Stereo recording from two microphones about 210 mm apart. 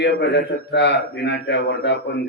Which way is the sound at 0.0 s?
55° left (ahead or behind).